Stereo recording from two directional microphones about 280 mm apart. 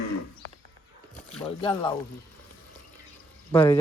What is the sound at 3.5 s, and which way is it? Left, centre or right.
Speech, centre.